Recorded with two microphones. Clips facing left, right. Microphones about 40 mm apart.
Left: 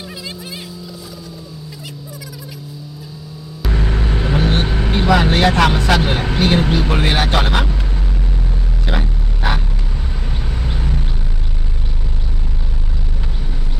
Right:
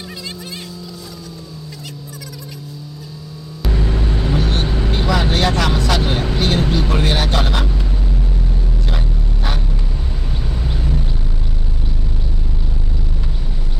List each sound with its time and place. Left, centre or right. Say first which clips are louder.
3.7 s vehicle: even; left
8.9 s vehicle: left 3 dB; left
10.6 s vehicle: right 1 dB; centre